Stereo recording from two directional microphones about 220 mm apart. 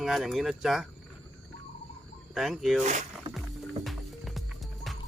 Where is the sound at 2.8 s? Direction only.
35° right (ahead or behind).